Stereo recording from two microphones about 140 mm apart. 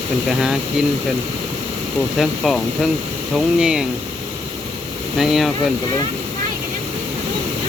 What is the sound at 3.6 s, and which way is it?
Speech, 5° right (ahead or behind).